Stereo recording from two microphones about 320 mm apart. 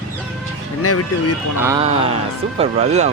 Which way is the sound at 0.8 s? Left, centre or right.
Left.